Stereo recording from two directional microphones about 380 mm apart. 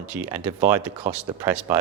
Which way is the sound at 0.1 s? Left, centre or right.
Centre.